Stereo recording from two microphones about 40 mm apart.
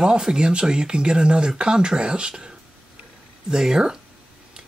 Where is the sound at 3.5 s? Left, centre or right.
Centre.